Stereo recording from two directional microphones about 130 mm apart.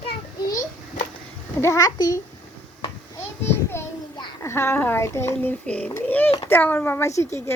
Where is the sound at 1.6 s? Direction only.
25° left (ahead or behind).